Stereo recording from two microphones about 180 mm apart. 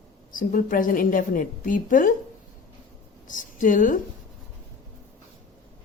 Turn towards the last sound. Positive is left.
turn(degrees=45)  # may be behind; listen again after turning